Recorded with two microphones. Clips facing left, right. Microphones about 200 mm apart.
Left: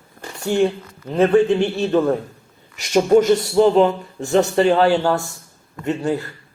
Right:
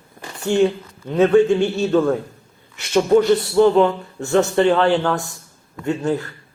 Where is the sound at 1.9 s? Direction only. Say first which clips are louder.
Even; 15° left (ahead or behind).